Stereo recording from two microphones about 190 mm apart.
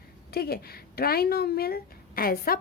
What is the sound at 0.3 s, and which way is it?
A woman's voice, 55° left (ahead or behind).